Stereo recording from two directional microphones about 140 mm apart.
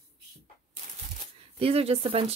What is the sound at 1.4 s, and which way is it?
Speech, 45° right (ahead or behind).